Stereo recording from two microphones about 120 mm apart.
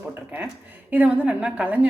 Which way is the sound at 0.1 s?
15° right (ahead or behind).